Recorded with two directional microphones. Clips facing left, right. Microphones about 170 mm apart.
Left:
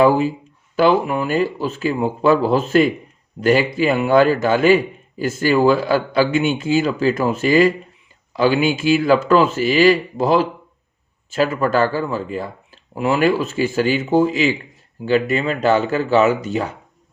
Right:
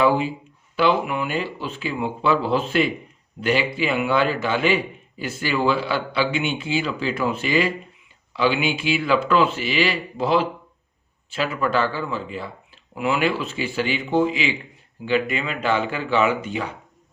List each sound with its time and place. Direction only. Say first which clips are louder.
0.0 s a man's voice: left 5 dB; 40° left (ahead or behind)